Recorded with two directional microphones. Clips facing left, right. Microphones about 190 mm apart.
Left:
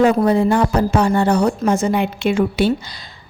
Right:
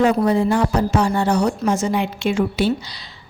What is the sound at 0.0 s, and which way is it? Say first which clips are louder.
Speech: left 2 dB; 55° left (ahead or behind).